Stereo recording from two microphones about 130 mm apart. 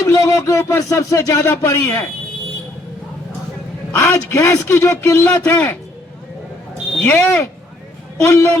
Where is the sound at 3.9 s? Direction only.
20° left (ahead or behind).